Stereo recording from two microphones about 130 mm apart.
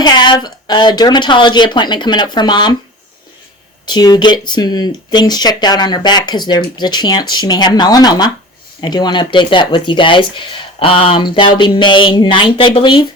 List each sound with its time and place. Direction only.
0.0 s speech: 35° left (ahead or behind)
3.8 s speech: 35° left (ahead or behind)